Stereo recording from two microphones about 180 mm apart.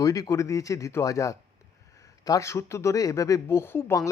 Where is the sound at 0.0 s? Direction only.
20° left (ahead or behind).